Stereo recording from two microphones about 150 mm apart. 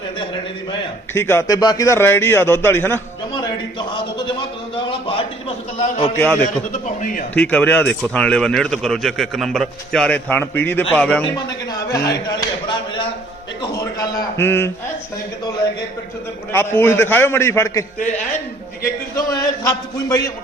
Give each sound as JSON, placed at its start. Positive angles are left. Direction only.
{"t": 1.1, "sound": "a man's voice", "side_deg": 15}
{"t": 4.7, "sound": "a sound", "side_deg": 35}
{"t": 5.7, "sound": "a man's voice", "side_deg": 50}
{"t": 7.3, "sound": "a man's voice", "side_deg": 10}
{"t": 11.7, "sound": "a sound", "side_deg": 25}
{"t": 16.5, "sound": "a man's voice", "side_deg": 15}
{"t": 19.1, "sound": "a man's voice", "side_deg": 20}